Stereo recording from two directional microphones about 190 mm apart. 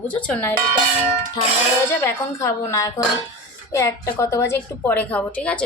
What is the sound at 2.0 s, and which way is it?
A woman's voice, 15° left (ahead or behind).